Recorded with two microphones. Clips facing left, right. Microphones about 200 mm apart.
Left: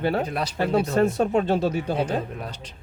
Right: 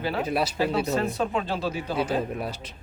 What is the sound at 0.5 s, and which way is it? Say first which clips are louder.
Speech: left 3 dB; 50° left (ahead or behind).